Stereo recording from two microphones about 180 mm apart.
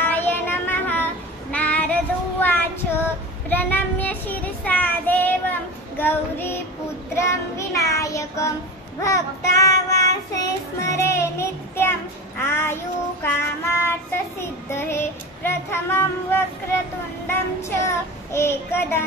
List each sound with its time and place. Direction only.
0.0 s music: 10° left (ahead or behind)
1.5 s child singing: 10° left (ahead or behind)